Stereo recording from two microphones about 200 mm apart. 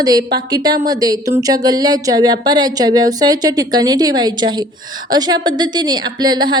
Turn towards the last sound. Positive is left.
turn(degrees=-20)  # may be behind; listen again after turning